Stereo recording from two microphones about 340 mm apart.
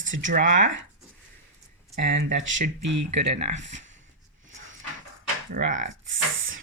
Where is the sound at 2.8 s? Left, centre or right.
Right.